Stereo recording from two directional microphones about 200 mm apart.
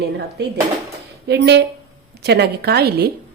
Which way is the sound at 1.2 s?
55° right (ahead or behind).